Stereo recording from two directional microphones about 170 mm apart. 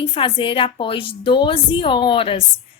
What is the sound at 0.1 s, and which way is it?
A woman's voice, 30° left (ahead or behind).